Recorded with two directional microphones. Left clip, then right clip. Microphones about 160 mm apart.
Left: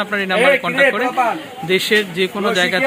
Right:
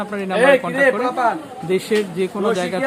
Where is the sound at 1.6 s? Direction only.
10° right (ahead or behind).